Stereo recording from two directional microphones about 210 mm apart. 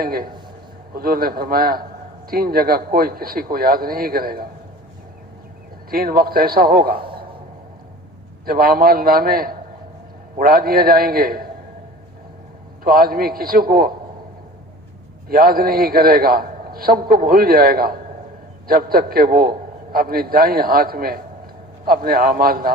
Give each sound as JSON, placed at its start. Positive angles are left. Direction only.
{"t": 0.0, "sound": "a man's voice", "side_deg": -45}
{"t": 5.9, "sound": "a man's voice", "side_deg": -45}
{"t": 8.4, "sound": "a man's voice", "side_deg": -45}
{"t": 12.8, "sound": "a man's voice", "side_deg": -45}
{"t": 15.3, "sound": "a man's voice", "side_deg": -45}